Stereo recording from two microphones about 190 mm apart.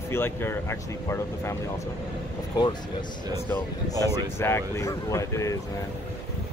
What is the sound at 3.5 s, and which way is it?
Speech, 10° left (ahead or behind).